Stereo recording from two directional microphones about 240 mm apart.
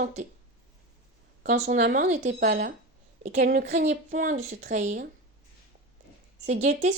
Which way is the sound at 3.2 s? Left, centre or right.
Right.